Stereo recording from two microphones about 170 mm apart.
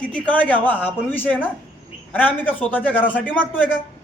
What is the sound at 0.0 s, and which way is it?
A man's voice, 5° left (ahead or behind).